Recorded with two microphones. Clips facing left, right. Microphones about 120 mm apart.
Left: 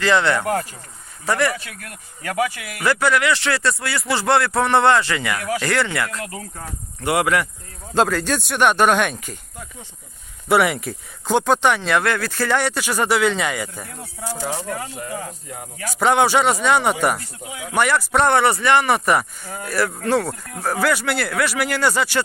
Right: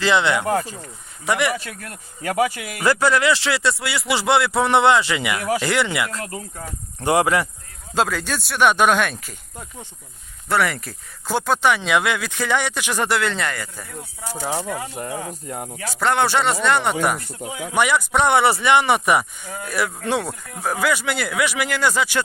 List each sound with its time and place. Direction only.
0.0 s speech: 20° right (ahead or behind)
3.1 s speech: 30° right (ahead or behind)
4.4 s speech: centre (ahead or behind)
4.7 s speech: 25° right (ahead or behind)
6.1 s speech: 35° right (ahead or behind)
7.9 s speech: 10° right (ahead or behind)
10.5 s speech: 5° left (ahead or behind)
11.3 s speech: 5° right (ahead or behind)
12.6 s speech: 10° left (ahead or behind)
14.3 s speech: 15° right (ahead or behind)
15.0 s cricket: 45° right (ahead or behind)
16.0 s speech: 10° left (ahead or behind)